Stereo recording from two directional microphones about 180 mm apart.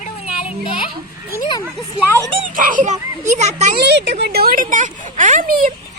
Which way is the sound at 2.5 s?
45° right (ahead or behind).